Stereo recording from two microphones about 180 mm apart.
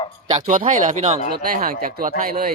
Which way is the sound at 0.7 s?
45° right (ahead or behind).